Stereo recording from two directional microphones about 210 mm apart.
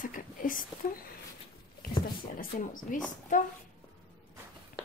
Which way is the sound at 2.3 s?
40° left (ahead or behind).